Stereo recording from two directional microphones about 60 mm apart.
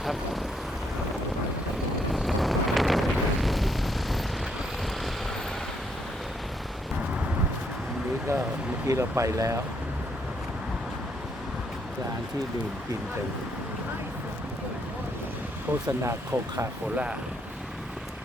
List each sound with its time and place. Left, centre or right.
0.0 s vehicle: centre
2.1 s vehicle: centre
8.3 s a sound: right
9.0 s speech: right
16.0 s speech: right